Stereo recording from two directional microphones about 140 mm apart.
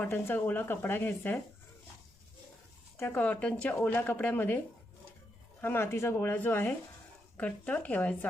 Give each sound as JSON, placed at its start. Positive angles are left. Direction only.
{"t": 0.0, "sound": "speech", "side_deg": 15}
{"t": 3.0, "sound": "speech", "side_deg": 15}